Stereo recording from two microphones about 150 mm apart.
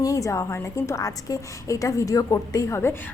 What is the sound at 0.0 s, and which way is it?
A woman's voice, 20° left (ahead or behind).